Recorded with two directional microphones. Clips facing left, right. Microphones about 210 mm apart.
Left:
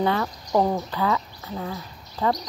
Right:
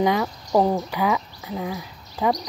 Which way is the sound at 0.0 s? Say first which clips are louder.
Right 2 dB; 10° right (ahead or behind).